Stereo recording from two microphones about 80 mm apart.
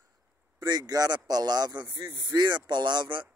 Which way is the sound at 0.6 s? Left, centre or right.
Right.